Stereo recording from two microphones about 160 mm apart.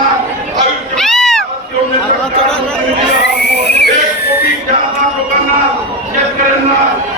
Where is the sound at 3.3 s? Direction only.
90° left.